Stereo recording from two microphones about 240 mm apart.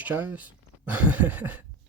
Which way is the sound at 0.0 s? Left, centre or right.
Centre.